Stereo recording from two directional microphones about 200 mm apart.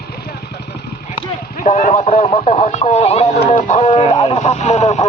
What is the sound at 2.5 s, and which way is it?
Radio, 40° left (ahead or behind).